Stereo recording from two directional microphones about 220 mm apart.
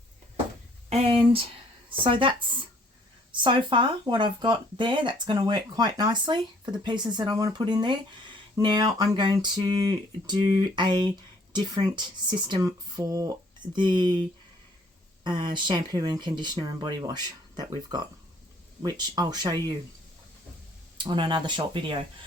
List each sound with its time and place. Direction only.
0.9 s speech: 25° right (ahead or behind)
15.2 s speech: 20° right (ahead or behind)
21.0 s speech: 20° right (ahead or behind)